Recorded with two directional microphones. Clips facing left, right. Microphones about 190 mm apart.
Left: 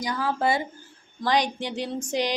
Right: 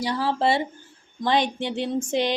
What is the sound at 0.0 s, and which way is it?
Speech, 30° right (ahead or behind).